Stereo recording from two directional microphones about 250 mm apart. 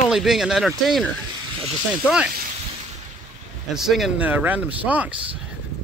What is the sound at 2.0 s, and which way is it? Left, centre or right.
Speech, centre.